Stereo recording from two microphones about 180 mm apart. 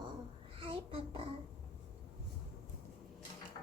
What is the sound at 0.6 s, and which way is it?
Child singing, 30° right (ahead or behind).